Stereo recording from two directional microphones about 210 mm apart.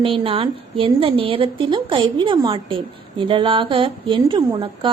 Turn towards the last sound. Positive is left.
turn(degrees=-25)  # may be behind; listen again after turning